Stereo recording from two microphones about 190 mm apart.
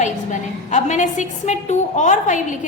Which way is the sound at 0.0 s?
40° left (ahead or behind).